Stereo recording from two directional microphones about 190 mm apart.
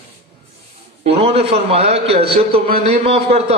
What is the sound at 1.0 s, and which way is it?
A man's voice, 30° right (ahead or behind).